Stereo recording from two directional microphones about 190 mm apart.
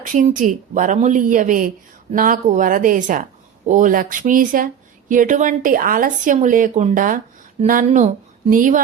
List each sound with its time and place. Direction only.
0.0 s speech: 40° right (ahead or behind)